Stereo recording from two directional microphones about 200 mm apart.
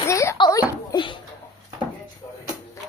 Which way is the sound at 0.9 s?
20° left (ahead or behind).